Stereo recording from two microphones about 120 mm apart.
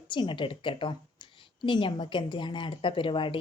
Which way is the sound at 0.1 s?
40° left (ahead or behind).